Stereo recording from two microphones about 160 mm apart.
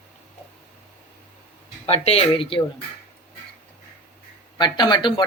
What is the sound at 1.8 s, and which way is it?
Speech, 40° left (ahead or behind).